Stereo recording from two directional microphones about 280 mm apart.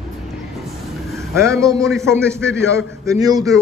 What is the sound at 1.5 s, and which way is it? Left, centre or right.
A man's voice, centre.